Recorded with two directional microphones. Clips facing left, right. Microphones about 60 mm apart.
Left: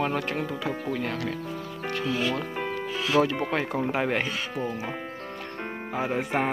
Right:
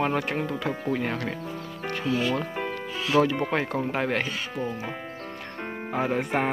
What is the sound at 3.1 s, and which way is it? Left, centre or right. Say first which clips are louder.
Speech: right 2 dB; centre.